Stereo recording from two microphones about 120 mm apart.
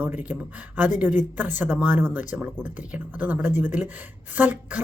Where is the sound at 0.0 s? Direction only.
15° right (ahead or behind).